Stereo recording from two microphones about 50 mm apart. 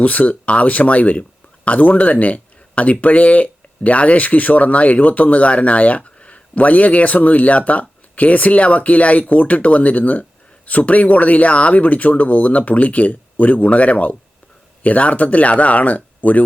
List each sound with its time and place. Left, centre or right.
0.0 s speech: left